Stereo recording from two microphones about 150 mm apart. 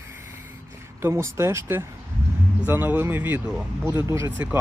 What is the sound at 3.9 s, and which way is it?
Speech, 20° right (ahead or behind).